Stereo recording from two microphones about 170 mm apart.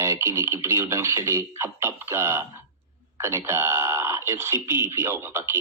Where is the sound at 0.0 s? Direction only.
15° right (ahead or behind).